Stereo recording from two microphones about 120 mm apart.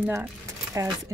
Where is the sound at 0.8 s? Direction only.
25° right (ahead or behind).